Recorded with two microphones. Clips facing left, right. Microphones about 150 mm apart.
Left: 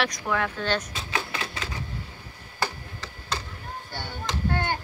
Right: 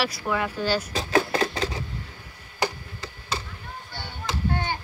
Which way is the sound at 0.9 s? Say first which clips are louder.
Right 9 dB; 40° right (ahead or behind).